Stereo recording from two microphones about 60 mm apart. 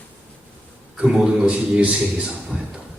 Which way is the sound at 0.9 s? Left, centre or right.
Centre.